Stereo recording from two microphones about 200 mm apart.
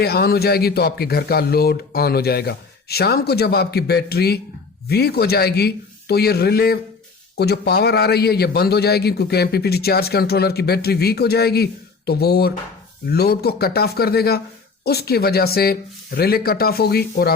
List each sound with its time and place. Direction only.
0.0 s a man's voice: 50° left (ahead or behind)